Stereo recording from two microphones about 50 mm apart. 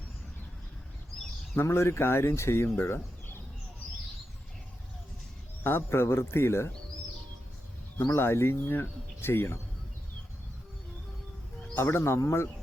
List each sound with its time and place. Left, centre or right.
1.7 s a man's voice: left
2.7 s chicken: left
5.6 s a man's voice: left
8.1 s speech: left
11.8 s a man's voice: left